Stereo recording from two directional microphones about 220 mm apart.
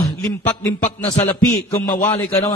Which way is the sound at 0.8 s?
30° left (ahead or behind).